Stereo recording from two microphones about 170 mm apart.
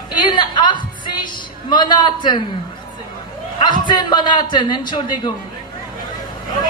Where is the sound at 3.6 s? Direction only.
25° left (ahead or behind).